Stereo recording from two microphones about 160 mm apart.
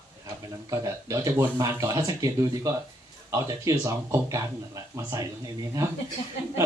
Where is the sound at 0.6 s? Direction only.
20° right (ahead or behind).